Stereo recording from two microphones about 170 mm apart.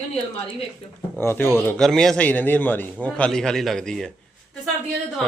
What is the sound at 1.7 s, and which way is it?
A man's voice, centre (ahead or behind).